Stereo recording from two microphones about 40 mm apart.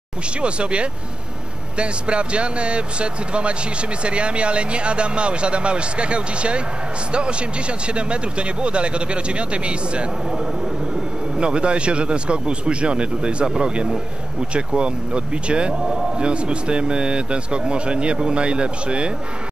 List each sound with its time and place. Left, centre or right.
0.4 s a man's voice: right
11.3 s a man's voice: right